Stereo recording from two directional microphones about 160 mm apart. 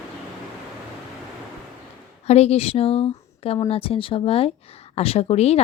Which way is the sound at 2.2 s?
40° left (ahead or behind).